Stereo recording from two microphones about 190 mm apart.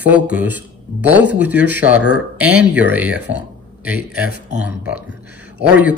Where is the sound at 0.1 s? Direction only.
10° right (ahead or behind).